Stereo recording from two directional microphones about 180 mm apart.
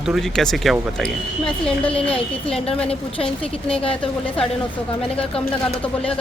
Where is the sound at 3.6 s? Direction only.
30° left (ahead or behind).